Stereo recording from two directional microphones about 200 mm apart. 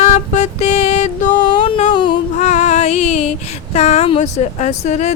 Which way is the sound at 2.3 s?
35° left (ahead or behind).